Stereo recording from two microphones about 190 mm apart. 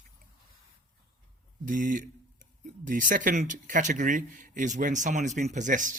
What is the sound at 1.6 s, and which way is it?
A man's voice, 45° right (ahead or behind).